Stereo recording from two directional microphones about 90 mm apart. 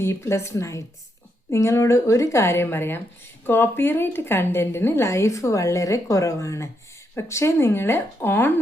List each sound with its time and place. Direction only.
0.0 s a woman's voice: 30° left (ahead or behind)